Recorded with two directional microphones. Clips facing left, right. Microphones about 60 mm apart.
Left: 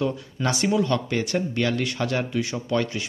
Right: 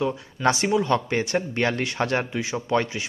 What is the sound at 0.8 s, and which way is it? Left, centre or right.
Speech, right.